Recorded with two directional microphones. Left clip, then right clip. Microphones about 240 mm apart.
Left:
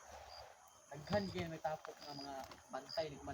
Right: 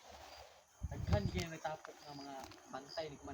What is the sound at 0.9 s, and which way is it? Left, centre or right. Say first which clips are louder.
Speech: left 1 dB; centre.